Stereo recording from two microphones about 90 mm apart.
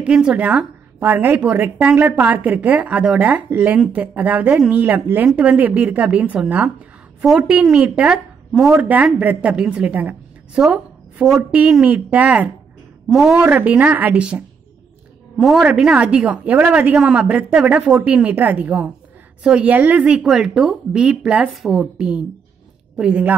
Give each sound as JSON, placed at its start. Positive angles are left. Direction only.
{"t": 0.0, "sound": "a woman's voice", "side_deg": -10}
{"t": 9.2, "sound": "a woman's voice", "side_deg": -15}
{"t": 11.8, "sound": "a woman's voice", "side_deg": -15}
{"t": 13.1, "sound": "a woman's voice", "side_deg": 0}
{"t": 13.5, "sound": "a woman's voice", "side_deg": -20}
{"t": 15.3, "sound": "a woman's voice", "side_deg": -5}